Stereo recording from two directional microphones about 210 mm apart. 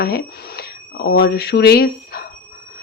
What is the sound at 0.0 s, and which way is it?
Speech, 50° left (ahead or behind).